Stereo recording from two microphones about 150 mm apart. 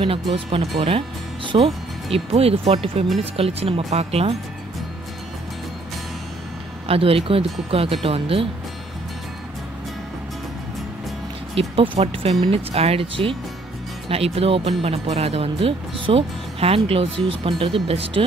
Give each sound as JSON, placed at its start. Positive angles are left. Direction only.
{"t": 0.0, "sound": "speech", "side_deg": -35}
{"t": 6.9, "sound": "speech", "side_deg": -40}
{"t": 11.5, "sound": "speech", "side_deg": -35}